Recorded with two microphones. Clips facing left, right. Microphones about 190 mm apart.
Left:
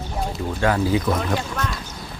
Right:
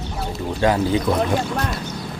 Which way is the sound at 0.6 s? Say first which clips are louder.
Right 3 dB; 20° right (ahead or behind).